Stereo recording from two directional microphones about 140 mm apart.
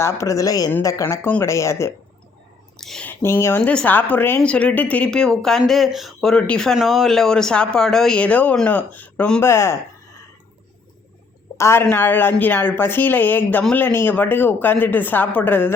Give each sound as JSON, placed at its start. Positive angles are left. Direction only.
{"t": 0.0, "sound": "speech", "side_deg": 20}
{"t": 2.7, "sound": "speech", "side_deg": 5}
{"t": 3.1, "sound": "a woman's voice", "side_deg": 15}
{"t": 11.5, "sound": "a woman's voice", "side_deg": 20}